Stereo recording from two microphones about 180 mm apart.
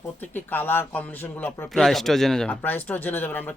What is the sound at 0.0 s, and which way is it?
A man's voice, 10° left (ahead or behind).